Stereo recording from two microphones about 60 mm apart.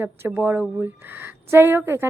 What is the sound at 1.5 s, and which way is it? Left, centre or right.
Speech, right.